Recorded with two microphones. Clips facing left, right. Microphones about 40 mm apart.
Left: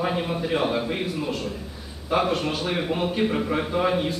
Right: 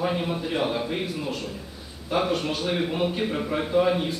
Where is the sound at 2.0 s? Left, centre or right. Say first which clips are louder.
Left 2 dB; centre.